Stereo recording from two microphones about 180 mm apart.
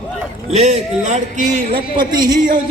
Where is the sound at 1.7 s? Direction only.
25° right (ahead or behind).